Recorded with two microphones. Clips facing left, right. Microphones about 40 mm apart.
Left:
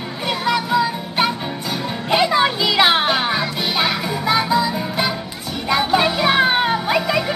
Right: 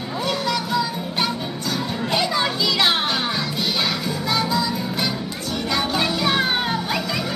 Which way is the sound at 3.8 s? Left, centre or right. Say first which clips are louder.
Left 4 dB; centre.